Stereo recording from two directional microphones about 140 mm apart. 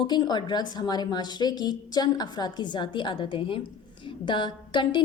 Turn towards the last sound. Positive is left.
turn(degrees=35)  # may be behind; listen again after turning